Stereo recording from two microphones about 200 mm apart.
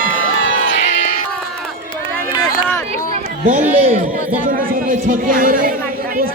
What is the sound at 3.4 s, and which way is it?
A man's voice, 40° right (ahead or behind).